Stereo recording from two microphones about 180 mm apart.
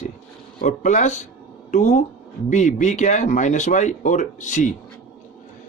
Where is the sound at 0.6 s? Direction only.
45° left (ahead or behind).